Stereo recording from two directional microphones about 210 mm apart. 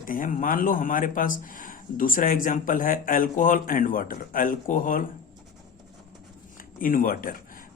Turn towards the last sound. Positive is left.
turn(degrees=40)  # may be behind; listen again after turning